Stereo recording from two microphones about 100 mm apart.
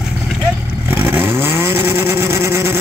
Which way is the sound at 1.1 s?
20° right (ahead or behind).